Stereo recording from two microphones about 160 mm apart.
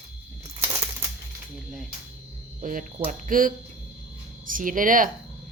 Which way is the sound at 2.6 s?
60° right (ahead or behind).